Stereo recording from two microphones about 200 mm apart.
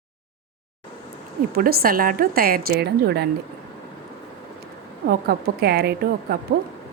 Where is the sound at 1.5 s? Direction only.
50° right (ahead or behind).